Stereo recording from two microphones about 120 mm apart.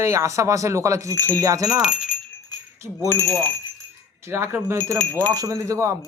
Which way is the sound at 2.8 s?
20° right (ahead or behind).